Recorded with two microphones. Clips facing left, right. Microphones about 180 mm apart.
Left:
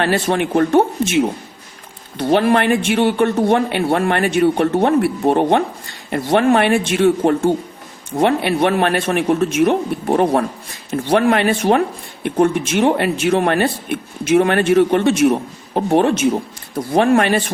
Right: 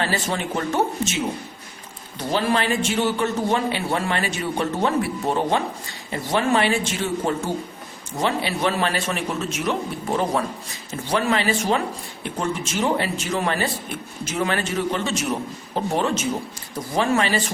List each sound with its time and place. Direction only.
0.0 s speech: 60° left (ahead or behind)